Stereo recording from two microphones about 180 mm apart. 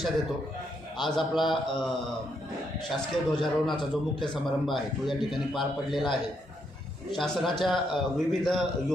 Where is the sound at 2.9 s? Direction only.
Centre (ahead or behind).